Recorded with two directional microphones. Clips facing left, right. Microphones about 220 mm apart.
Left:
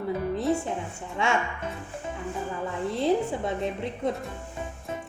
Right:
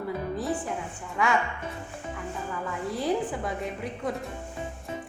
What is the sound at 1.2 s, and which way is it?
Speech, 25° left (ahead or behind).